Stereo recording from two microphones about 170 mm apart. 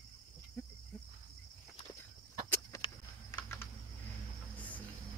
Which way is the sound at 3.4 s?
15° left (ahead or behind).